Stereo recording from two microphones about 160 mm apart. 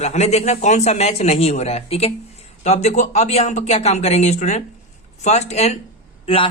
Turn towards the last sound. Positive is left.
turn(degrees=35)  # may be behind; listen again after turning